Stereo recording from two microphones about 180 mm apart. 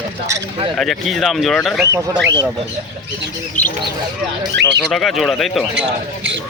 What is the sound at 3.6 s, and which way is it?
Speech, 10° left (ahead or behind).